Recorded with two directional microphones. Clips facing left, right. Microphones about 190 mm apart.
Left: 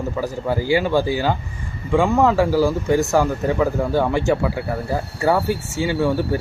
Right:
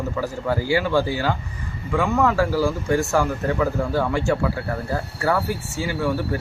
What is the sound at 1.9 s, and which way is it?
Speech, 25° left (ahead or behind).